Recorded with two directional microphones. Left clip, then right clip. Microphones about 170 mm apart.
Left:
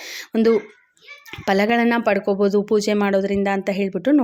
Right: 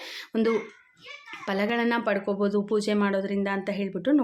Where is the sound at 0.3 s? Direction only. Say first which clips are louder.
Left 8 dB; 35° left (ahead or behind).